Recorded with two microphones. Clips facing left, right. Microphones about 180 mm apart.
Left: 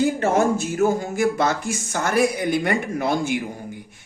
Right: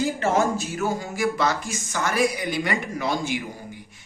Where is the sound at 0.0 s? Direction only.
55° left (ahead or behind).